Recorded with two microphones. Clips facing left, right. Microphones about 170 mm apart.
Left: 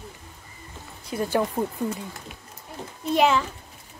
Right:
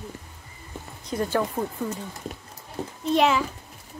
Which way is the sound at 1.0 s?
10° left (ahead or behind).